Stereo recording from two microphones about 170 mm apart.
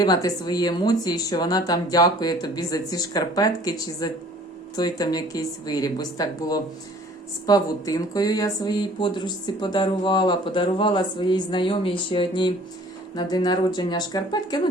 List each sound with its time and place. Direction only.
0.0 s speech: 20° left (ahead or behind)